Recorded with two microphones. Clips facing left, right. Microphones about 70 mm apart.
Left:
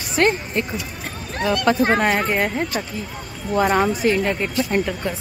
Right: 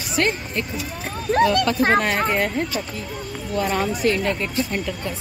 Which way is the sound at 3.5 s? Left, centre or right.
Left.